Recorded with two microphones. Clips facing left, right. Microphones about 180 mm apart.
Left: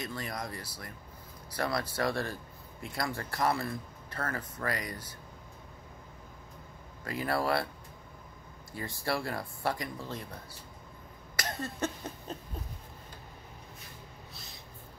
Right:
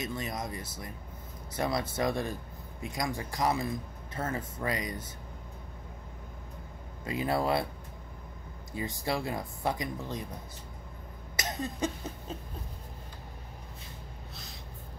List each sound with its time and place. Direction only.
0.0 s speech: 20° right (ahead or behind)
7.1 s speech: 20° right (ahead or behind)
8.7 s speech: 20° right (ahead or behind)
11.3 s cough: 20° right (ahead or behind)